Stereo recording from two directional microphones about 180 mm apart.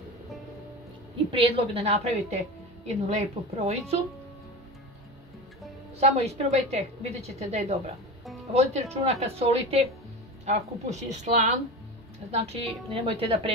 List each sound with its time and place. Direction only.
1.3 s a woman's voice: 30° right (ahead or behind)
5.9 s a woman's voice: 35° right (ahead or behind)